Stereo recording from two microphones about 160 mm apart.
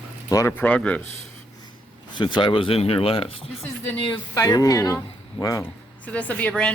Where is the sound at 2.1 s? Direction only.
30° left (ahead or behind).